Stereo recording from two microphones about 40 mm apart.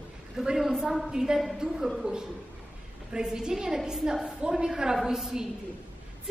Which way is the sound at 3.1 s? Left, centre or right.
Centre.